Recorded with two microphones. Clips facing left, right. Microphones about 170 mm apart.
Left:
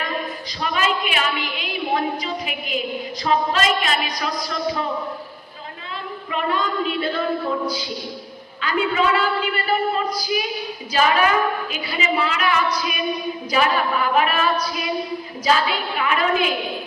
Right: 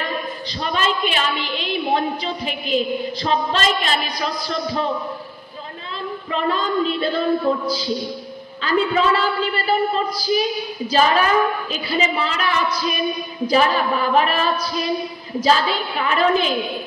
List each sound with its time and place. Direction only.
0.6 s a woman's voice: 30° right (ahead or behind)
6.3 s a woman's voice: 30° right (ahead or behind)
8.6 s a woman's voice: 35° right (ahead or behind)